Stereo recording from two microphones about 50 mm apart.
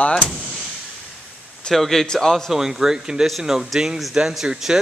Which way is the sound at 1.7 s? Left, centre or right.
Centre.